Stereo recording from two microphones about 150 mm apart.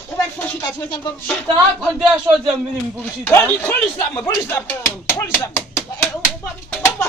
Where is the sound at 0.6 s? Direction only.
15° left (ahead or behind).